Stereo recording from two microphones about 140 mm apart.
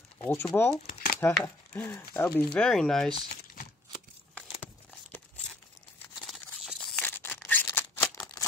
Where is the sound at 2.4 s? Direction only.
5° left (ahead or behind).